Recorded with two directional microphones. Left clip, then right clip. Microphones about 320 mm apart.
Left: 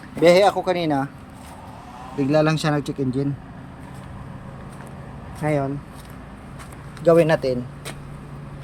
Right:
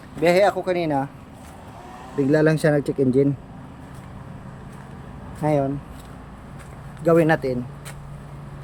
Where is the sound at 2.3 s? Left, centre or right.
Centre.